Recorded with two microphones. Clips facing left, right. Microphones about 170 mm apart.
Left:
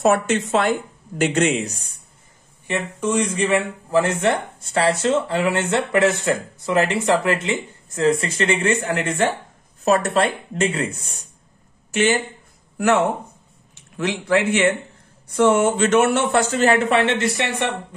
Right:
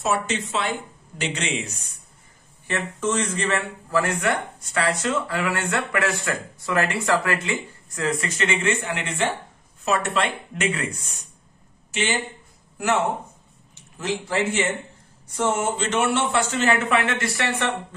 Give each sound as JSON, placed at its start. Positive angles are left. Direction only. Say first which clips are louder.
{"t": 0.0, "sound": "speech", "louder": "left 7 dB", "side_deg": 55}
{"t": 2.6, "sound": "a man's voice", "louder": "left 2 dB", "side_deg": 15}
{"t": 11.9, "sound": "speech", "louder": "left 7 dB", "side_deg": 50}
{"t": 13.9, "sound": "a man's voice", "louder": "left 5 dB", "side_deg": 65}
{"t": 15.8, "sound": "a man's voice", "louder": "left 6 dB", "side_deg": 45}